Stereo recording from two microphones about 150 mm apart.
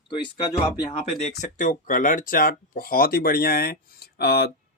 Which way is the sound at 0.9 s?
45° left (ahead or behind).